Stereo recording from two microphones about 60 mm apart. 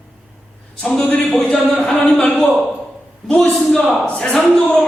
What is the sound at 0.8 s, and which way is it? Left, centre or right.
Speech, centre.